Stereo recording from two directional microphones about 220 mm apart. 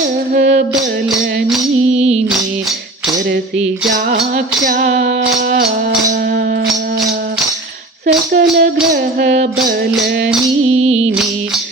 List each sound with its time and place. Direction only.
0.3 s music: 50° right (ahead or behind)
3.9 s music: 45° right (ahead or behind)
8.0 s speech: 45° right (ahead or behind)
8.5 s music: 40° right (ahead or behind)